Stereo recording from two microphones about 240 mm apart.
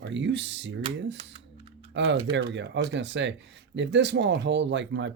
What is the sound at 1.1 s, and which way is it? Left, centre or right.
Typing, right.